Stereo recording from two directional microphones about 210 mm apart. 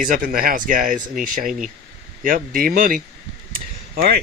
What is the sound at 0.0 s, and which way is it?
Speech, 40° right (ahead or behind).